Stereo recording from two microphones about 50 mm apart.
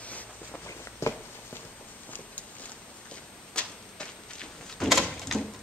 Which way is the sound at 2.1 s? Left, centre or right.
Left.